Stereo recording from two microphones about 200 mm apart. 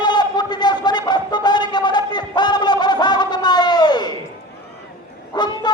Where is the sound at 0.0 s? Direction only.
20° left (ahead or behind).